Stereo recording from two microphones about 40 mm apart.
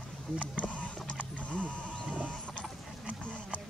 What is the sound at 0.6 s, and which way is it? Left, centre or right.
Horse, left.